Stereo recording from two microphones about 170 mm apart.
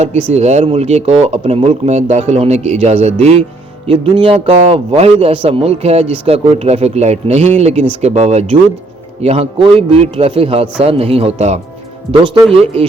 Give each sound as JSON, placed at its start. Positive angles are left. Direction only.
{"t": 0.3, "sound": "a man's voice", "side_deg": -40}
{"t": 12.1, "sound": "speech", "side_deg": -25}